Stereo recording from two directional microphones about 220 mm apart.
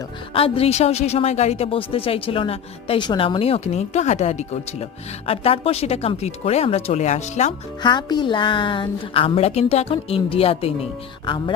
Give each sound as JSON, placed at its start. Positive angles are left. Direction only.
{"t": 0.3, "sound": "a woman's voice", "side_deg": 25}
{"t": 7.8, "sound": "a woman's voice", "side_deg": 20}